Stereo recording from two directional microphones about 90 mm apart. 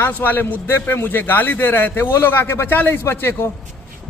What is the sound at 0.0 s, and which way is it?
A man's voice, 20° left (ahead or behind).